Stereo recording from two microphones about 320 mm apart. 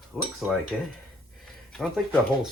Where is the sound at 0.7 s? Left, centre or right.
Centre.